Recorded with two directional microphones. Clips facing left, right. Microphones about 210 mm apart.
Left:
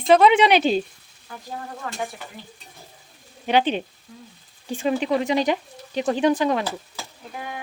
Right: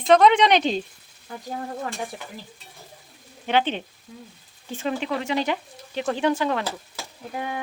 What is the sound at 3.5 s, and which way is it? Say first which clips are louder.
Speech: left 3 dB; 15° left (ahead or behind).